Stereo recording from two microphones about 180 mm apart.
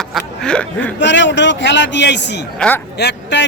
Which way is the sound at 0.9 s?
80° left.